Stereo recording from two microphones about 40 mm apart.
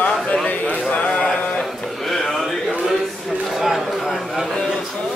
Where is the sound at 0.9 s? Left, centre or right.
Left.